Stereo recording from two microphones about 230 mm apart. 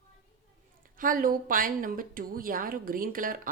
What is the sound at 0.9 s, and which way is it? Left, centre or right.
Speech, right.